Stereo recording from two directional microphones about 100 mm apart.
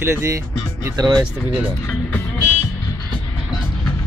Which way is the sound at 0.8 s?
40° right (ahead or behind).